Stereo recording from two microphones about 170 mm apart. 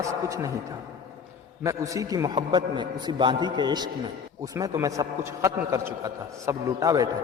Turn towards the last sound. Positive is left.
turn(degrees=-20)  # may be behind; listen again after turning